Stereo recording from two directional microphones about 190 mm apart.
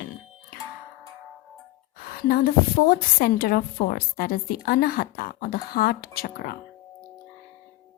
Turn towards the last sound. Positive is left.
turn(degrees=50)  # may be behind; listen again after turning